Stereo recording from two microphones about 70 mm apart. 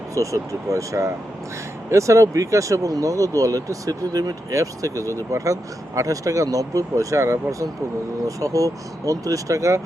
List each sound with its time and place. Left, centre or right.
0.1 s speech: right